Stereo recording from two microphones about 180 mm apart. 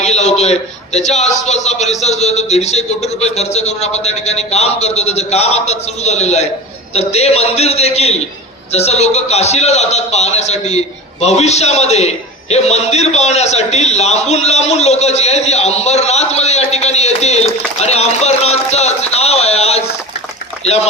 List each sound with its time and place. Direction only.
0.0 s a man's voice: 40° left (ahead or behind)